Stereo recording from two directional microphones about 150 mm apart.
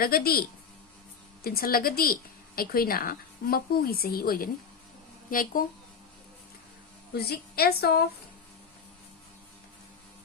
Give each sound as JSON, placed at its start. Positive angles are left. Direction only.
{"t": 0.0, "sound": "a woman's voice", "side_deg": 85}
{"t": 1.5, "sound": "a woman's voice", "side_deg": 80}
{"t": 5.3, "sound": "a woman's voice", "side_deg": 65}
{"t": 7.1, "sound": "a woman's voice", "side_deg": 90}